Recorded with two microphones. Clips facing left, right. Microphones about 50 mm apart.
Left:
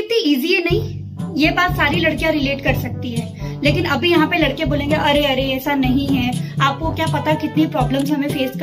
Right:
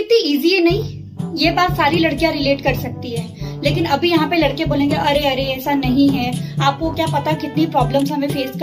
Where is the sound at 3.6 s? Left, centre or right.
Left.